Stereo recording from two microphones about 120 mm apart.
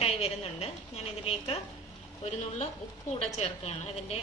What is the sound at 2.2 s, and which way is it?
A woman's voice, 70° left (ahead or behind).